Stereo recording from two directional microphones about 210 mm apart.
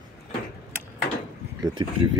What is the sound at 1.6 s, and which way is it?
Speech, 20° right (ahead or behind).